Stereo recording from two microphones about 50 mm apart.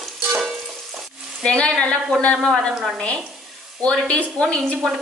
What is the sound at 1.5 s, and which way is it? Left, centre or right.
Sizzle, centre.